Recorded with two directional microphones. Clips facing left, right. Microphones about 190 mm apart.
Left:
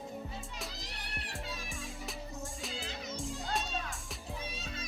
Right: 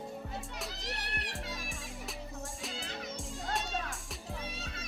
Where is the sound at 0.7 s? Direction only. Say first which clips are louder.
Right 4 dB; 75° right (ahead or behind).